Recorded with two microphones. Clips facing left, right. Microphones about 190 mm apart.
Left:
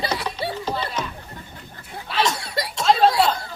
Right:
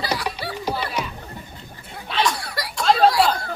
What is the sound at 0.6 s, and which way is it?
Music, 10° right (ahead or behind).